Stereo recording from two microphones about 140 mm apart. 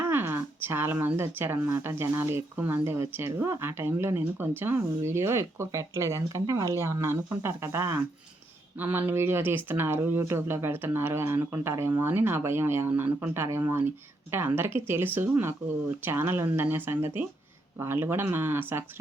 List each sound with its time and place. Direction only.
0.1 s speech: 15° right (ahead or behind)